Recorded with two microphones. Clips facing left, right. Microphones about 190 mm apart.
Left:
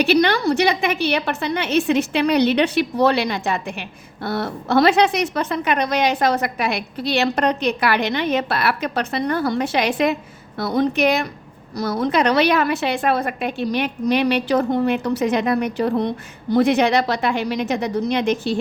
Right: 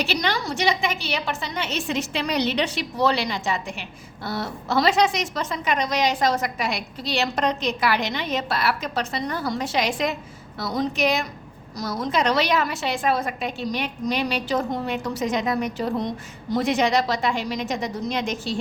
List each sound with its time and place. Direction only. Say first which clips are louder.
0.0 s a woman's voice: left 9 dB; 60° left (ahead or behind)